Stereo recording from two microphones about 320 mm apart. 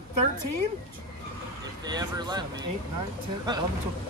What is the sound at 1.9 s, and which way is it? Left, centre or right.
Speech, centre.